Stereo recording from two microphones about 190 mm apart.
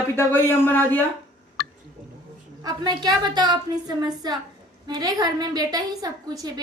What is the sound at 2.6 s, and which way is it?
A woman's voice, 20° right (ahead or behind).